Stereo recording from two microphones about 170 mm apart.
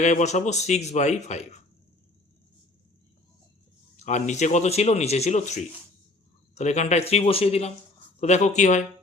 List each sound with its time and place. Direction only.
0.0 s speech: 45° left (ahead or behind)
3.9 s speech: 45° left (ahead or behind)